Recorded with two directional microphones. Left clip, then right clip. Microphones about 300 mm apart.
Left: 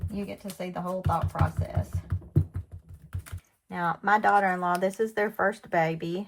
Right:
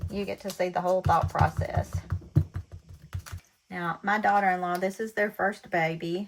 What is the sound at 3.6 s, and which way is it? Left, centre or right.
Speech, centre.